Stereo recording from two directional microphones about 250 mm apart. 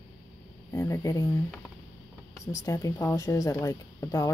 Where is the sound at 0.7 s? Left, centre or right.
Centre.